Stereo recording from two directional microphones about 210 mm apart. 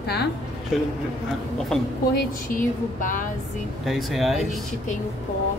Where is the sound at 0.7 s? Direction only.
Centre (ahead or behind).